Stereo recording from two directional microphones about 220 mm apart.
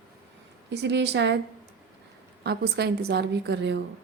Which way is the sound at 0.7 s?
50° right (ahead or behind).